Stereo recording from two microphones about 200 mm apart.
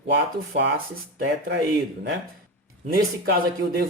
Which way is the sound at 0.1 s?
60° right (ahead or behind).